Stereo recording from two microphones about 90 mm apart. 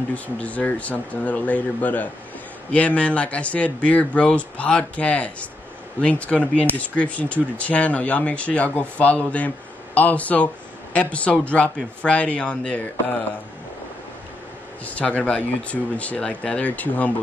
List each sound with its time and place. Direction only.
0.1 s speech: 15° left (ahead or behind)
14.9 s speech: 15° left (ahead or behind)